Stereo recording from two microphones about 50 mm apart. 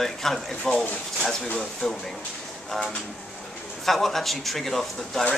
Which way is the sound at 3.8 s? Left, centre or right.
Centre.